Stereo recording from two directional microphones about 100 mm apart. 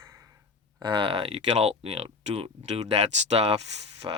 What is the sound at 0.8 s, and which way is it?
Speech, 50° right (ahead or behind).